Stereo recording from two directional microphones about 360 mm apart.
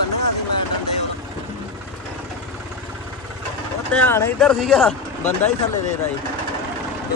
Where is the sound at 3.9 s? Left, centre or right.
Centre.